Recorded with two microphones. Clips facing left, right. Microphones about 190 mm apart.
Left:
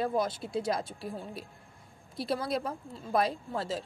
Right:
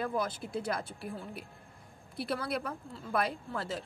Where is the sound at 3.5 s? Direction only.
25° left (ahead or behind).